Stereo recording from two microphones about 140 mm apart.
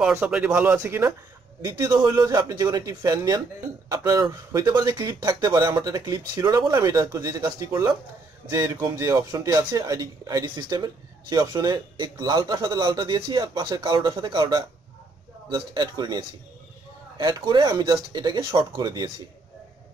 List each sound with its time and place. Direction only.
0.1 s speech: 10° right (ahead or behind)
1.6 s a man's voice: 25° right (ahead or behind)
17.2 s a man's voice: 30° right (ahead or behind)